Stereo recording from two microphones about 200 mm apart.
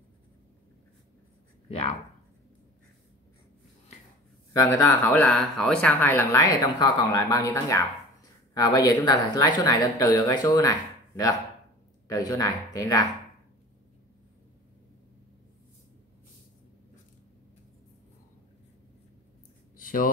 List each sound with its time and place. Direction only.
1.7 s speech: 30° left (ahead or behind)
4.6 s speech: 15° left (ahead or behind)
19.8 s a sound: 45° left (ahead or behind)